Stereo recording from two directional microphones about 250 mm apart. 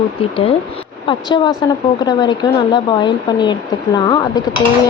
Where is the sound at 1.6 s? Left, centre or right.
Centre.